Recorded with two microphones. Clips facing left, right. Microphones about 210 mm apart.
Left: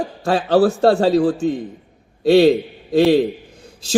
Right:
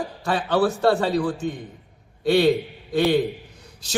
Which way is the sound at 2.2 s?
25° left (ahead or behind).